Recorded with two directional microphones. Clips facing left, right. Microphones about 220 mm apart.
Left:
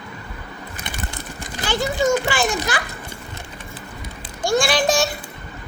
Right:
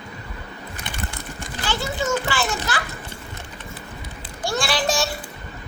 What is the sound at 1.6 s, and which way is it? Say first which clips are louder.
Children playing: left 6 dB; 15° left (ahead or behind).